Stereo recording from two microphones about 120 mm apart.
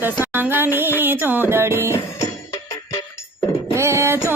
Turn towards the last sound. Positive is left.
turn(degrees=-25)  # may be behind; listen again after turning